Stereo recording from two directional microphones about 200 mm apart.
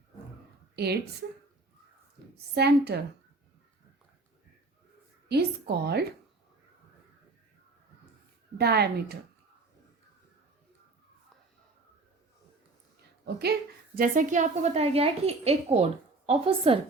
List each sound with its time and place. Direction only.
2.6 s a woman's voice: 55° right (ahead or behind)
5.3 s a woman's voice: 55° right (ahead or behind)
8.5 s a woman's voice: 55° right (ahead or behind)
13.2 s a woman's voice: 50° right (ahead or behind); by 16.7 s 30° right (ahead or behind)